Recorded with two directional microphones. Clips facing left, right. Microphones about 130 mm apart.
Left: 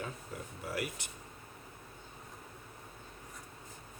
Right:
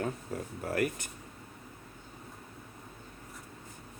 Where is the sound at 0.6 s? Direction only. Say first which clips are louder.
Right 7 dB; 50° right (ahead or behind).